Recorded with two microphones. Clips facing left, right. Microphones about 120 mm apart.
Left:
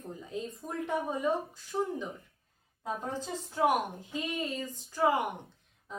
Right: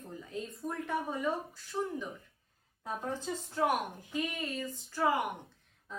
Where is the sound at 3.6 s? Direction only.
20° left (ahead or behind).